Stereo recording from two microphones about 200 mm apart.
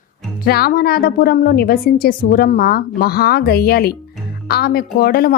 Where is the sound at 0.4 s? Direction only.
50° left (ahead or behind).